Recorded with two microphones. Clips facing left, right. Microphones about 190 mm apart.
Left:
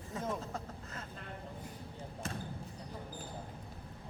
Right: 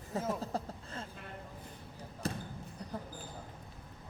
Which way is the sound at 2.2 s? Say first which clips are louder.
Right 5 dB; 35° right (ahead or behind).